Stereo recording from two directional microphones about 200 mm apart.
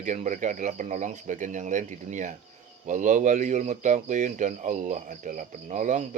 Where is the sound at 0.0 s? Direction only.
35° right (ahead or behind).